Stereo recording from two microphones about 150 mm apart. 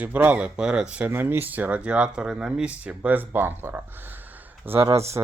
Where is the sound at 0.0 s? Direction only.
10° right (ahead or behind).